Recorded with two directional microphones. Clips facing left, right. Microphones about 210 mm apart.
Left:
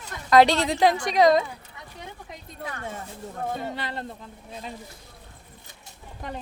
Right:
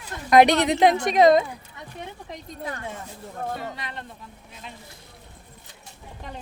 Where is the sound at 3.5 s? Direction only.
30° left (ahead or behind).